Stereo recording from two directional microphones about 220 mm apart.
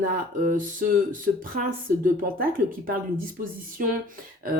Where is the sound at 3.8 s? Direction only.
40° right (ahead or behind).